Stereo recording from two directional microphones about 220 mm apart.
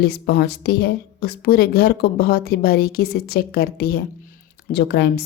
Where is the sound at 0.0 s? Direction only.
50° left (ahead or behind).